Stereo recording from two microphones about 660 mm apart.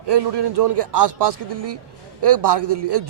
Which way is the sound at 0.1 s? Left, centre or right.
Right.